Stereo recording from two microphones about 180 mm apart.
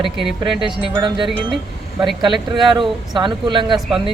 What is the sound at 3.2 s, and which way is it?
Speech, 25° right (ahead or behind).